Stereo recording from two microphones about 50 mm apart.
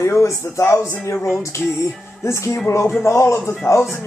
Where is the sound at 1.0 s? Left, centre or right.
Left.